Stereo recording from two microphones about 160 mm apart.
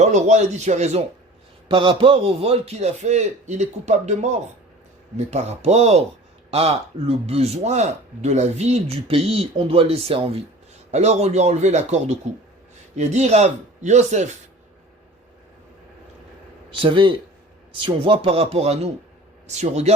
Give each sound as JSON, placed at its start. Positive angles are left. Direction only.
{"t": 0.0, "sound": "a man's voice", "side_deg": -45}
{"t": 1.6, "sound": "a man's voice", "side_deg": -35}
{"t": 16.8, "sound": "a man's voice", "side_deg": -35}